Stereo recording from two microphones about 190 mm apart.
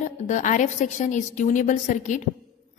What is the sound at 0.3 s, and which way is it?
A woman's voice, 40° left (ahead or behind).